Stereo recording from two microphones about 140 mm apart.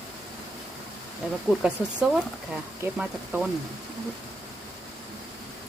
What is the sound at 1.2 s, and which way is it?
Speech, 10° right (ahead or behind).